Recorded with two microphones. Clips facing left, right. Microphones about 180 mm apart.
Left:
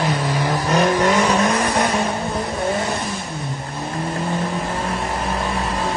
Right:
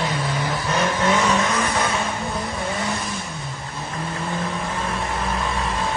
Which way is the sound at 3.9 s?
35° left (ahead or behind).